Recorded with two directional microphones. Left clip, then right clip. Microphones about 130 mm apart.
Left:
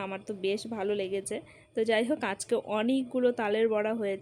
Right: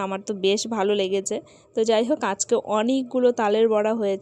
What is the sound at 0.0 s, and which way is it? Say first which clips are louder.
A woman's voice: right 9 dB; 40° right (ahead or behind).